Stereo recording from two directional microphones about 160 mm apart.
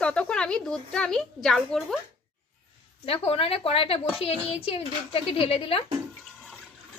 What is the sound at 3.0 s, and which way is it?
A woman's voice, 35° left (ahead or behind).